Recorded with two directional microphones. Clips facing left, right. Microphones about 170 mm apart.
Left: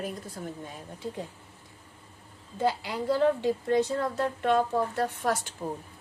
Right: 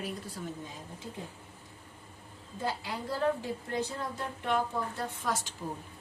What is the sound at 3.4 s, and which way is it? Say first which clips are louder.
Speech: left 9 dB; 75° left (ahead or behind).